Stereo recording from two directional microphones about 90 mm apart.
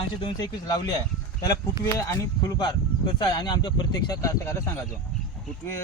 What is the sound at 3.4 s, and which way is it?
Speech, 55° left (ahead or behind).